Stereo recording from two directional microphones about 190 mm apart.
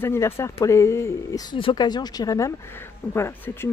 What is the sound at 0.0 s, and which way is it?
Speech, 15° left (ahead or behind).